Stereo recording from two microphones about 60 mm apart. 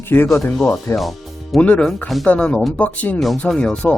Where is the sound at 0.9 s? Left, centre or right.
Left.